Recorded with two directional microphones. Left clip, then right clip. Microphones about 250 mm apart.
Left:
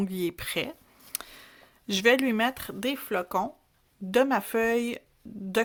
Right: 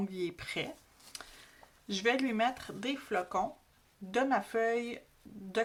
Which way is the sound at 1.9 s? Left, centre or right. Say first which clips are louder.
Left 9 dB; left.